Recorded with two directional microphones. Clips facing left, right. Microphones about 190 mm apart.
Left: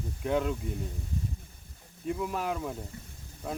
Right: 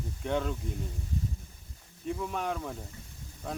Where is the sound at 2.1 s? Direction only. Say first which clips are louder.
Left 1 dB; 5° left (ahead or behind).